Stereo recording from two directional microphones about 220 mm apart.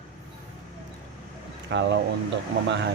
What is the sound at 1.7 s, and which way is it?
Speech, 55° right (ahead or behind).